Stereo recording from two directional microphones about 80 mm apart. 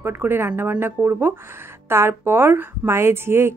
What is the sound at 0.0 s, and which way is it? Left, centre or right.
A woman's voice, right.